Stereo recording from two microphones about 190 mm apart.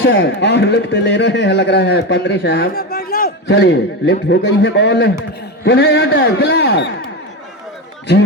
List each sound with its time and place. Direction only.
0.0 s speech: 70° left (ahead or behind)
2.6 s a man's voice: 50° left (ahead or behind)